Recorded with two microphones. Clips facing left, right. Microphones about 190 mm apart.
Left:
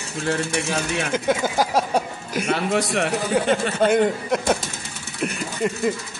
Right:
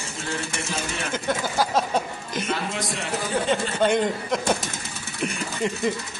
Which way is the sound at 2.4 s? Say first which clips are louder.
Left 8 dB; 70° left (ahead or behind).